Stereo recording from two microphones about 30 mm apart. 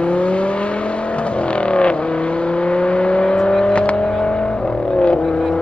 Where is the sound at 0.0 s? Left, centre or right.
Left.